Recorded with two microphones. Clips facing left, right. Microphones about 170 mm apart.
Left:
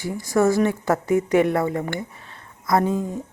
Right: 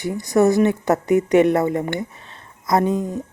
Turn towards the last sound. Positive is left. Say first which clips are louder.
# right 2 dB
turn(degrees=-20)  # may be behind; listen again after turning